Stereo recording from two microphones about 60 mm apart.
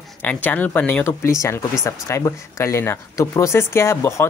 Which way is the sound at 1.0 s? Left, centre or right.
Left.